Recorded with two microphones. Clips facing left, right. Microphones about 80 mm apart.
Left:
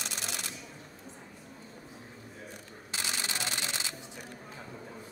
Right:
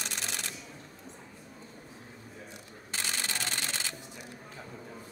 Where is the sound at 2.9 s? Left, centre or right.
Right.